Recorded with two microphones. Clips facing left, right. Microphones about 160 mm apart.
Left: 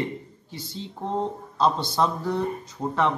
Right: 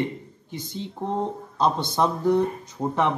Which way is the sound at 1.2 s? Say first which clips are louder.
Left 1 dB; 15° right (ahead or behind).